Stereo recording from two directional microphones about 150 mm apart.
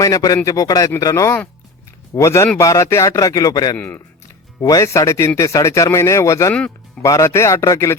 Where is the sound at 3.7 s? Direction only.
10° left (ahead or behind).